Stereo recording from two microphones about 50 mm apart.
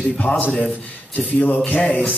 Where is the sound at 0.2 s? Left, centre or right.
Left.